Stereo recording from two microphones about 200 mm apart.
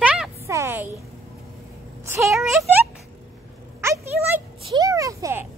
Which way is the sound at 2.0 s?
15° right (ahead or behind).